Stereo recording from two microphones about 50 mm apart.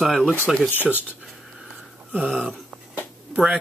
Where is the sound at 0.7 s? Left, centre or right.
Left.